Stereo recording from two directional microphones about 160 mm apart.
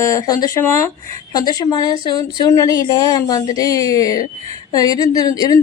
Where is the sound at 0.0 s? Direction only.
20° left (ahead or behind).